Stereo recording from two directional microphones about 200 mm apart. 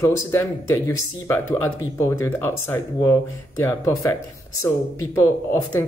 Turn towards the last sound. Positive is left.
turn(degrees=10)  # may be behind; listen again after turning